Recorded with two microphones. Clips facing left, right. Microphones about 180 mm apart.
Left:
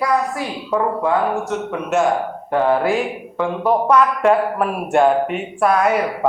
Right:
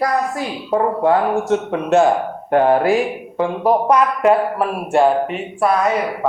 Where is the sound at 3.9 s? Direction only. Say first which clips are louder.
Even; 10° right (ahead or behind).